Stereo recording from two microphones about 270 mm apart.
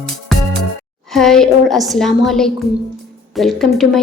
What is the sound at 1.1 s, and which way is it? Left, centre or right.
A woman's voice, centre.